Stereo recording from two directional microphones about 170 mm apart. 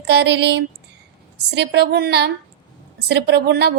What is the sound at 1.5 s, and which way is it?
Speech, 80° right.